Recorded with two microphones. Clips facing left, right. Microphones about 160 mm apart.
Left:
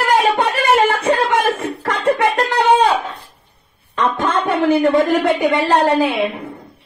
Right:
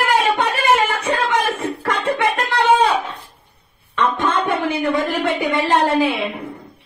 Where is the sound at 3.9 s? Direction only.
40° left (ahead or behind).